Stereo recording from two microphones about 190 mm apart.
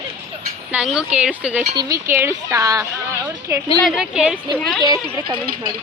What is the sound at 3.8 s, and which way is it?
Speech, centre (ahead or behind).